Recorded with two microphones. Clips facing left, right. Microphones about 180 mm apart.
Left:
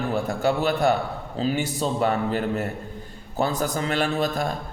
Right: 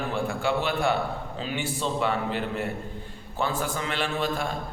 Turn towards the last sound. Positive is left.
turn(degrees=40)  # may be behind; listen again after turning